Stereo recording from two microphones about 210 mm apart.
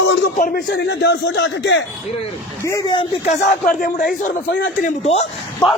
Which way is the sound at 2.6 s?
15° left (ahead or behind).